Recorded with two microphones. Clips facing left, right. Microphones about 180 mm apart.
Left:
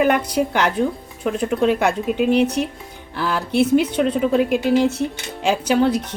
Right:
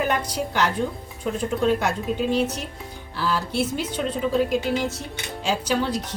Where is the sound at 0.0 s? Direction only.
60° left (ahead or behind).